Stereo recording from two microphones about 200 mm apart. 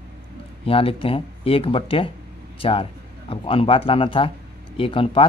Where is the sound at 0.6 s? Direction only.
30° left (ahead or behind).